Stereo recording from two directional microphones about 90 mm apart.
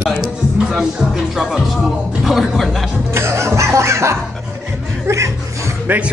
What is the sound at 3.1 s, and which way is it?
Music, 30° right (ahead or behind).